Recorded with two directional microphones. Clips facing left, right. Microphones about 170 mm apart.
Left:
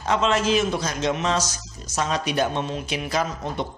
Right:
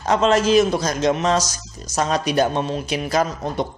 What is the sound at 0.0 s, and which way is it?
A man's voice, 40° right (ahead or behind).